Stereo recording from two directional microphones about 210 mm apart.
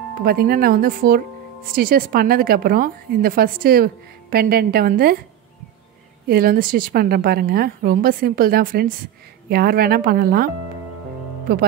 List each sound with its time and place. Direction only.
0.2 s speech: 45° right (ahead or behind)
6.2 s speech: 45° right (ahead or behind)